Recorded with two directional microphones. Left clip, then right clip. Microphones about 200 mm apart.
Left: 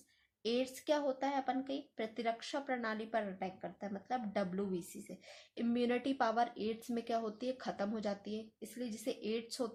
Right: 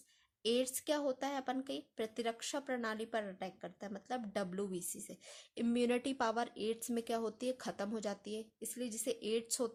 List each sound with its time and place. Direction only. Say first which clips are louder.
0.4 s speech: even; 45° right (ahead or behind)